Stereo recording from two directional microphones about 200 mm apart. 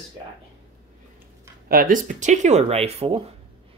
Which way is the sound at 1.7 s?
45° right (ahead or behind).